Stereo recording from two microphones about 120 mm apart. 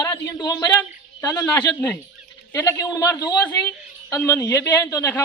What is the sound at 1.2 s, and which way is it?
Speech, 30° left (ahead or behind).